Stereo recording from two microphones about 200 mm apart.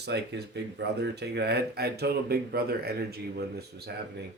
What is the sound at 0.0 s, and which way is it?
Speech, 55° right (ahead or behind).